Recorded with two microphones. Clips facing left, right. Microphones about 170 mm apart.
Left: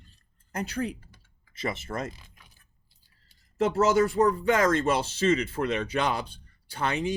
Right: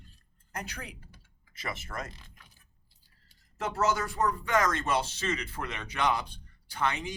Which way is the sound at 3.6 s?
25° left (ahead or behind).